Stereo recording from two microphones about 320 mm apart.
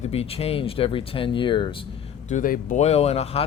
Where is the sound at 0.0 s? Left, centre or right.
Centre.